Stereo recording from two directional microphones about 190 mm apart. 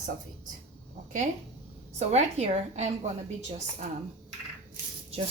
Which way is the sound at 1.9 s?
35° right (ahead or behind).